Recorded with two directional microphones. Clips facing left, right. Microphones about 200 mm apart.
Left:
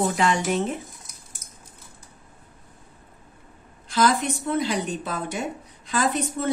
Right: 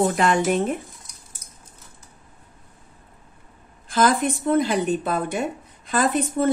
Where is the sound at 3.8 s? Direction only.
50° right (ahead or behind).